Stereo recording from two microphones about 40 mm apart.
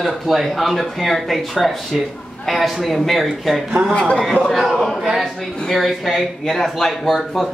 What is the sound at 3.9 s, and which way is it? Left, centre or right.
Speech, left.